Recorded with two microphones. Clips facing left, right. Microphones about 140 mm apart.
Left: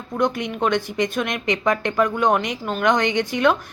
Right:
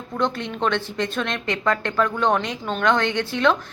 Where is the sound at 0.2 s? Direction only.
10° left (ahead or behind).